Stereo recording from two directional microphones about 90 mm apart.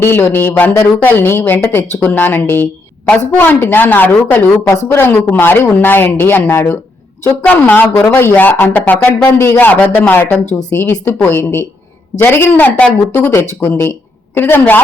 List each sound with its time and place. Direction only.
0.0 s speech: 25° left (ahead or behind)